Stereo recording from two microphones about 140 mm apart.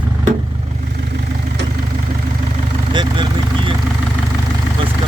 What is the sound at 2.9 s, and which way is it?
Vehicle, 35° right (ahead or behind).